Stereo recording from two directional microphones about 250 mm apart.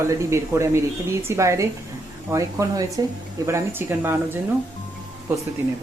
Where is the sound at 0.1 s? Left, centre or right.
Centre.